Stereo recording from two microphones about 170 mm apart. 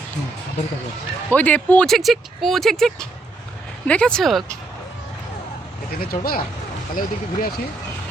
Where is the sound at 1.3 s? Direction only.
10° left (ahead or behind).